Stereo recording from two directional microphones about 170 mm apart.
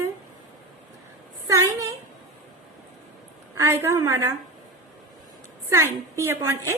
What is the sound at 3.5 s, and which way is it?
Speech, 15° right (ahead or behind).